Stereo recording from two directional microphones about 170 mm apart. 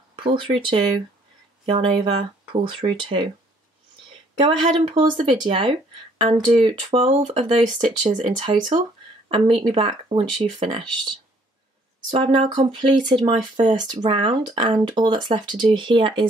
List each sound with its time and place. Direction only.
0.1 s speech: 30° right (ahead or behind)
4.4 s speech: 30° right (ahead or behind)
13.2 s speech: 40° right (ahead or behind)
13.7 s speech: 25° right (ahead or behind)